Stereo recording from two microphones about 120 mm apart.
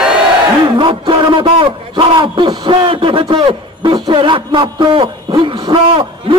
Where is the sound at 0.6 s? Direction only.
40° right (ahead or behind).